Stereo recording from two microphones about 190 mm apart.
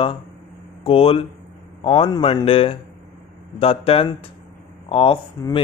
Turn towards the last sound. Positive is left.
turn(degrees=25)  # may be behind; listen again after turning